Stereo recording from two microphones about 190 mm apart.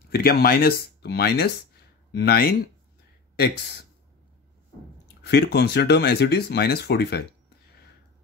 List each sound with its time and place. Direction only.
0.1 s speech: 50° left (ahead or behind)
5.2 s speech: 55° left (ahead or behind)